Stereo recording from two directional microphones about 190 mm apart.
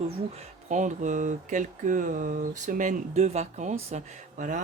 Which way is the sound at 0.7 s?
40° right (ahead or behind).